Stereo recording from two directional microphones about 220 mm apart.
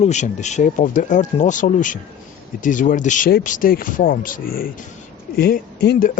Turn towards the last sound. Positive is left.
turn(degrees=45)  # may be behind; listen again after turning